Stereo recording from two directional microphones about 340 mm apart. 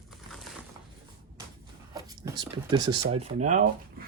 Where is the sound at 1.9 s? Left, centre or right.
Centre.